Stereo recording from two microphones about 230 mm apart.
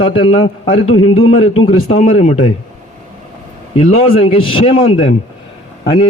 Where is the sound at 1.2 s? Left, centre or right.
Left.